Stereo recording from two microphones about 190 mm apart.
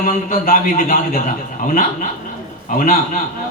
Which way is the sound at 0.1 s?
45° left (ahead or behind).